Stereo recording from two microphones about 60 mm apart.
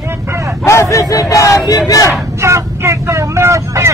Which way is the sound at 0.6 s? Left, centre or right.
Left.